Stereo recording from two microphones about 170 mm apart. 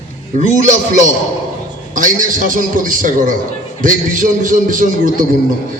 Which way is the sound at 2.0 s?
50° right (ahead or behind).